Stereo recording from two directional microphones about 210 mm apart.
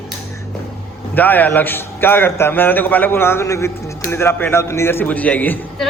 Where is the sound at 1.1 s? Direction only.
10° left (ahead or behind).